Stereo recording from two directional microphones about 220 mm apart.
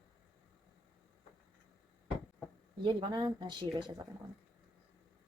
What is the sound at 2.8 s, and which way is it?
Speech, 20° right (ahead or behind).